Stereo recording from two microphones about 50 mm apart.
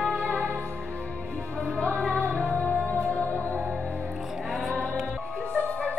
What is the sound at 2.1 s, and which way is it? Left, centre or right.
Music, left.